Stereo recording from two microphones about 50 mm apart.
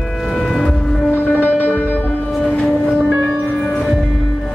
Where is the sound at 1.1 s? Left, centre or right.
Left.